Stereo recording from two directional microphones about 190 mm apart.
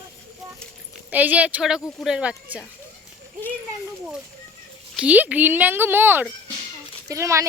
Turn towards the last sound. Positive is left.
turn(degrees=-15)  # may be behind; listen again after turning